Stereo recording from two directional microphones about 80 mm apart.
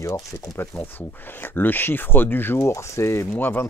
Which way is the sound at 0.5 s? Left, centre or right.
Left.